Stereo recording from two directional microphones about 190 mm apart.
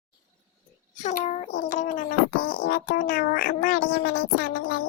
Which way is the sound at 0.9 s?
40° left (ahead or behind).